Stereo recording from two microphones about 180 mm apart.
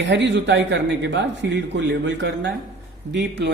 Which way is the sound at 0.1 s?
80° right.